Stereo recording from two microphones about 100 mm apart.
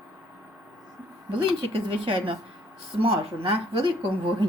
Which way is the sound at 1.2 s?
60° right (ahead or behind).